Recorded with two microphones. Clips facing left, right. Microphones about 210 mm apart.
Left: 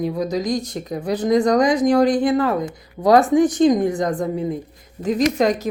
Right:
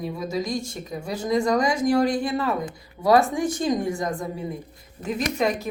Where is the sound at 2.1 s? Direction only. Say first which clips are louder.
Left 7 dB; 40° left (ahead or behind).